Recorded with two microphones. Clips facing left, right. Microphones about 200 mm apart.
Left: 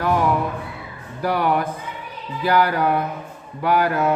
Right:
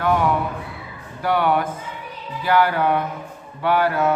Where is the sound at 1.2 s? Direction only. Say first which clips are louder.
Right 1 dB; 40° left (ahead or behind).